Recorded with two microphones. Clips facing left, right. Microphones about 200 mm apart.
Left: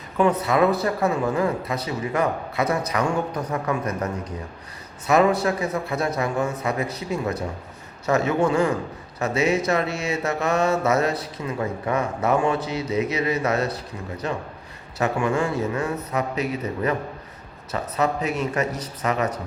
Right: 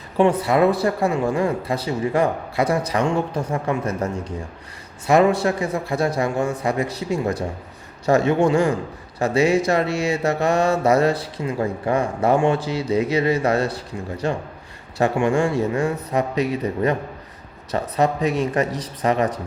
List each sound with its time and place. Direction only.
0.2 s speech: 30° right (ahead or behind)